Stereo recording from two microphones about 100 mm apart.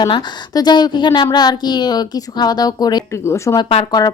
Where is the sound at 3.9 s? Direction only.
40° left (ahead or behind).